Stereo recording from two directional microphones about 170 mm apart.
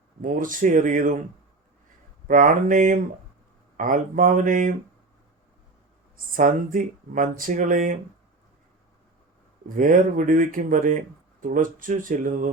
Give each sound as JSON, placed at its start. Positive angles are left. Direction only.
{"t": 0.2, "sound": "speech", "side_deg": -50}
{"t": 2.2, "sound": "speech", "side_deg": -50}
{"t": 6.3, "sound": "speech", "side_deg": -55}
{"t": 9.6, "sound": "speech", "side_deg": -55}